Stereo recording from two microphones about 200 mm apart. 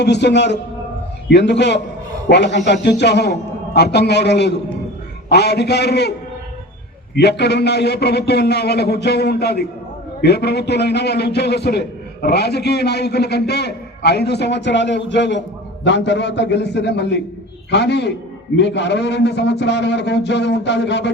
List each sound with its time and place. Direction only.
0.0 s a man's voice: 60° left (ahead or behind)
7.2 s a man's voice: 55° left (ahead or behind)